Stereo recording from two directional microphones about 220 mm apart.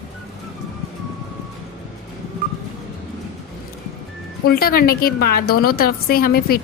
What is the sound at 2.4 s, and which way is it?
Music, 40° right (ahead or behind).